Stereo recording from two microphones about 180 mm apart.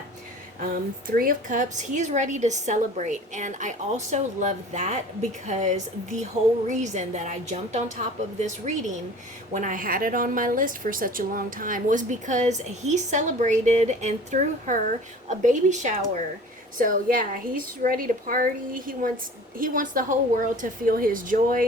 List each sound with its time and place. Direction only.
1.0 s a woman's voice: 50° right (ahead or behind)